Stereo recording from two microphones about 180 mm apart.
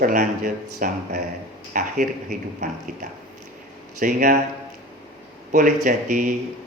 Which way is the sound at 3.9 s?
45° right (ahead or behind).